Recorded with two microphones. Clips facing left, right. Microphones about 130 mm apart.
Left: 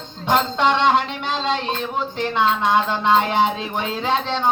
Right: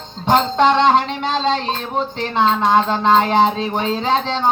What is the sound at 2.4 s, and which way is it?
Music, 30° right (ahead or behind).